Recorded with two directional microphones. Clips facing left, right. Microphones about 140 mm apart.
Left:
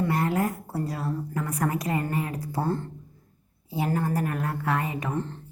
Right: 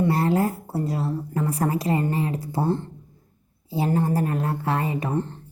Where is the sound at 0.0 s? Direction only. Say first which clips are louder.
Right 4 dB; 30° right (ahead or behind).